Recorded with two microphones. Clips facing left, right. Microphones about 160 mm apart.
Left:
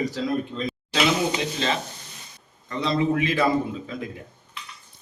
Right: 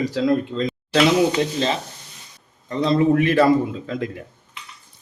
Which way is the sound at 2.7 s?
45° right (ahead or behind).